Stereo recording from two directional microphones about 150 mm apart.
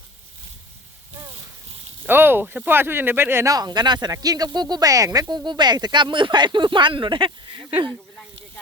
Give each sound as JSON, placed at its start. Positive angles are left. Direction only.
{"t": 2.0, "sound": "speech", "side_deg": -15}